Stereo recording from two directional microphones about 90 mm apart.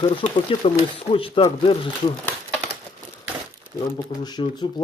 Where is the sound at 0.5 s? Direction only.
90° left.